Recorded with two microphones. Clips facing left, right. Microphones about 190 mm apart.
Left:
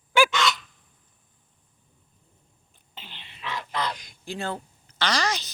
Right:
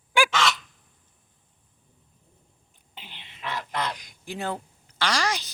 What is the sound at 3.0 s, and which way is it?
Throat clearing, 15° right (ahead or behind).